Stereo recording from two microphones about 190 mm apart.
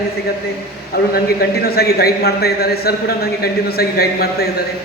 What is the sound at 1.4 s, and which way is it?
A man's voice, 55° left (ahead or behind).